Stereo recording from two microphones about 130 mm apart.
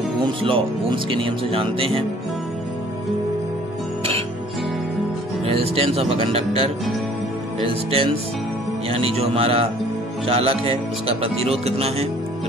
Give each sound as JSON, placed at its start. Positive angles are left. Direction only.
{"t": 0.4, "sound": "speech", "side_deg": -45}
{"t": 5.4, "sound": "speech", "side_deg": -50}